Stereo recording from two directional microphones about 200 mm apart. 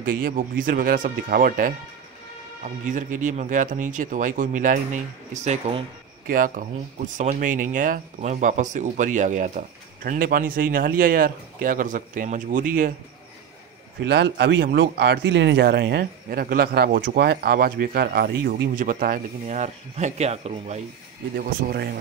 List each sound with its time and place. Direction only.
0.0 s speech: 45° right (ahead or behind)
6.2 s speech: 45° right (ahead or behind)
14.0 s speech: 55° right (ahead or behind)
19.4 s speech: 35° right (ahead or behind)
21.4 s speech: 45° right (ahead or behind)